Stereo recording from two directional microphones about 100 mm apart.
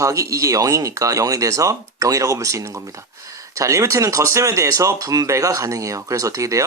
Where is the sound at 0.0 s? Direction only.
30° right (ahead or behind).